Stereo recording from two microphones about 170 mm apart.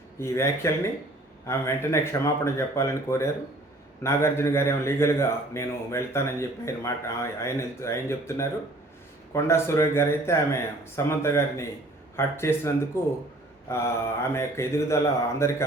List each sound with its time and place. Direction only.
0.2 s a man's voice: 15° left (ahead or behind)
13.7 s mantra: 15° left (ahead or behind)
14.3 s a man's voice: 15° left (ahead or behind)